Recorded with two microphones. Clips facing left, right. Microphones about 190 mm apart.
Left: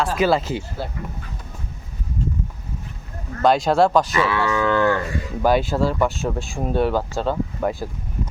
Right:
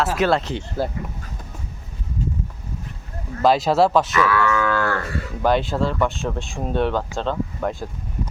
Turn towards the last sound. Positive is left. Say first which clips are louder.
# left 2 dB
turn(degrees=5)  # may be behind; listen again after turning